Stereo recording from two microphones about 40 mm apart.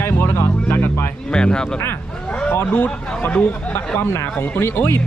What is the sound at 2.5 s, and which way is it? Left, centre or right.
Speech, left.